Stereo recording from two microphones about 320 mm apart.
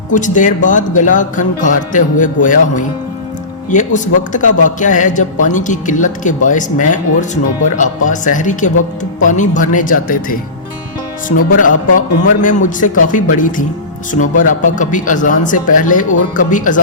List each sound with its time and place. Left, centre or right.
0.1 s speech: left
11.6 s speech: left